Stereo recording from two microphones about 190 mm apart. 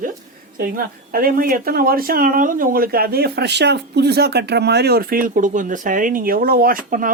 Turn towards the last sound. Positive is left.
turn(degrees=-45)  # may be behind; listen again after turning